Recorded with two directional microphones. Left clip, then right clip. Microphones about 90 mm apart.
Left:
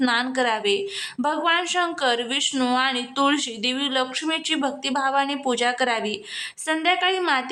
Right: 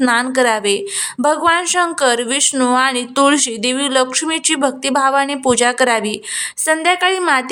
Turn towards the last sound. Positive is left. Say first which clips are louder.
# right 7 dB
turn(degrees=-45)  # may be behind; listen again after turning